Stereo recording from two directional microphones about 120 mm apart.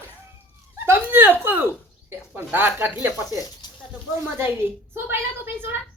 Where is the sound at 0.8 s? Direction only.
20° right (ahead or behind).